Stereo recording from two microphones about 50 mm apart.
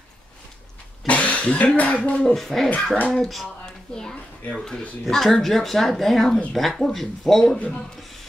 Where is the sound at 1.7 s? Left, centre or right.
Left.